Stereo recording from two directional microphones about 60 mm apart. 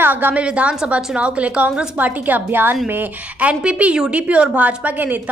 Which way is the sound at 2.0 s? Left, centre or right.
Right.